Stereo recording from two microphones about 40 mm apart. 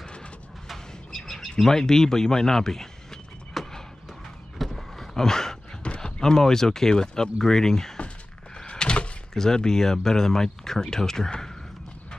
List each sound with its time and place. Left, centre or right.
0.0 s vehicle: left
0.7 s bird: centre
1.6 s a sound: centre
5.9 s speech: centre
8.6 s door: left
9.3 s speech: centre